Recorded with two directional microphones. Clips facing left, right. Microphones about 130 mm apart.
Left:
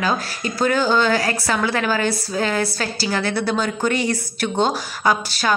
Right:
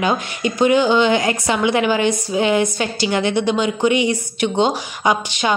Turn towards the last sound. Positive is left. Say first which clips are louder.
# right 1 dB
turn(degrees=-15)  # may be behind; listen again after turning